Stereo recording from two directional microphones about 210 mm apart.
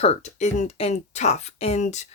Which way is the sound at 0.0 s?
30° left (ahead or behind).